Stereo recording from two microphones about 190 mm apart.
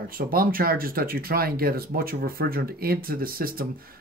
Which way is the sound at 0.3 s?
50° right (ahead or behind).